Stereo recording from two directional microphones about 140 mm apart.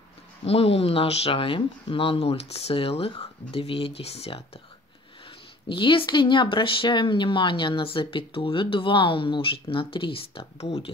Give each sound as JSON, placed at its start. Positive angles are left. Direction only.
{"t": 0.5, "sound": "speech", "side_deg": 45}
{"t": 5.7, "sound": "speech", "side_deg": 35}